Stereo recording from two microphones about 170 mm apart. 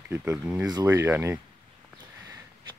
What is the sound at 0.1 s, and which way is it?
Speech, 15° right (ahead or behind).